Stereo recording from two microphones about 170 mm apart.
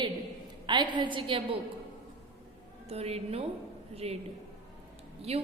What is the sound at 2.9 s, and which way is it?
A woman's voice, 35° right (ahead or behind).